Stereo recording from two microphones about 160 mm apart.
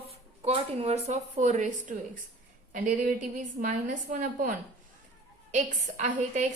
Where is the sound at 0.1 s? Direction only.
40° right (ahead or behind).